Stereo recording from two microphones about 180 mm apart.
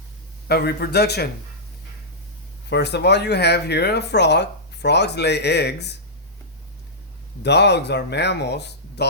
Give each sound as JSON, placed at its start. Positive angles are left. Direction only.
{"t": 0.4, "sound": "a man's voice", "side_deg": 60}
{"t": 2.6, "sound": "speech", "side_deg": 70}
{"t": 7.4, "sound": "speech", "side_deg": 70}